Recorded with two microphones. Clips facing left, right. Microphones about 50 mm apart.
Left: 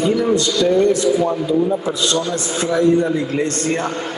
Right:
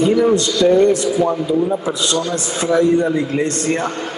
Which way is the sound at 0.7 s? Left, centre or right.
Right.